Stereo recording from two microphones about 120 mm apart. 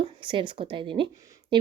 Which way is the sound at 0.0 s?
45° right (ahead or behind).